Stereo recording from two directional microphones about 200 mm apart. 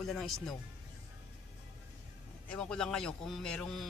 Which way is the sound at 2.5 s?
5° left (ahead or behind).